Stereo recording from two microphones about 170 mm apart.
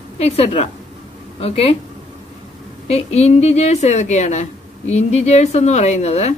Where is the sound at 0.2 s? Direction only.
40° left (ahead or behind).